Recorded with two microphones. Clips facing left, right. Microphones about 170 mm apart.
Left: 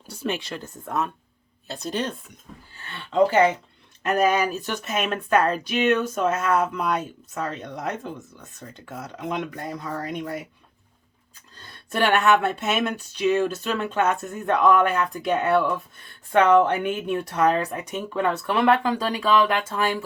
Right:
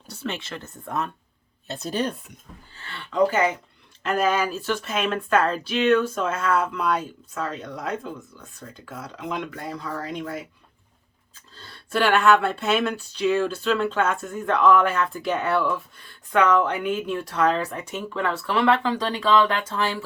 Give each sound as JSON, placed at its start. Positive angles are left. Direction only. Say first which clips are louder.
{"t": 0.1, "sound": "speech", "louder": "left 3 dB", "side_deg": 10}
{"t": 2.7, "sound": "speech", "louder": "left 2 dB", "side_deg": 20}
{"t": 8.5, "sound": "speech", "louder": "left 1 dB", "side_deg": 25}
{"t": 11.5, "sound": "speech", "louder": "right 2 dB", "side_deg": 15}